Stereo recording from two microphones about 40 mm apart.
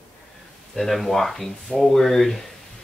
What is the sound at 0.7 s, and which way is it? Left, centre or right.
Speech, centre.